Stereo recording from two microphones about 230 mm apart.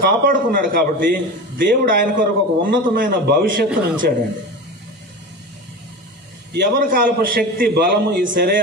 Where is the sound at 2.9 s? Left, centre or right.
Right.